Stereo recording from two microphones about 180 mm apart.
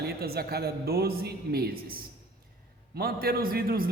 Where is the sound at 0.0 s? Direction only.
60° right (ahead or behind).